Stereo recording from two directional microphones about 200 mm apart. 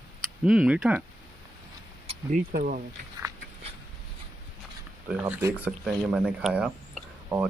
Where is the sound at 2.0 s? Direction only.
40° right (ahead or behind).